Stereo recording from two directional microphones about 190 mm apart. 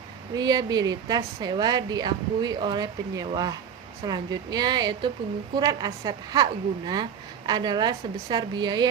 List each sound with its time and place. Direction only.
0.3 s a woman's voice: 20° right (ahead or behind)